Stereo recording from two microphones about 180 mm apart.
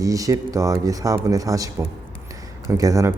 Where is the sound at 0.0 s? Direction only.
20° right (ahead or behind).